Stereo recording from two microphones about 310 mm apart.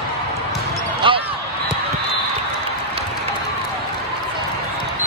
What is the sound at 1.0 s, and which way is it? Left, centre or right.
Basketball bounce, centre.